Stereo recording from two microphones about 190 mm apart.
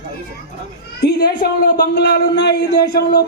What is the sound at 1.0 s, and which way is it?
A man's voice, 55° left (ahead or behind).